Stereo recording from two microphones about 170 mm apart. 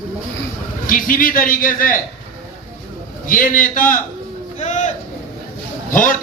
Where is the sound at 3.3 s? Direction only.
55° left (ahead or behind).